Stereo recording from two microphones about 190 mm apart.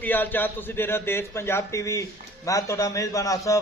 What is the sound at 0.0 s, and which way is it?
A man's voice, 10° left (ahead or behind).